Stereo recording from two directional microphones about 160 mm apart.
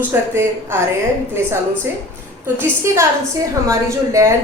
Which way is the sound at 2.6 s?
15° right (ahead or behind).